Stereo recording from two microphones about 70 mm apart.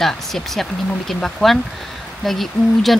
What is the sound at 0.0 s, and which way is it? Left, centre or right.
Speech, centre.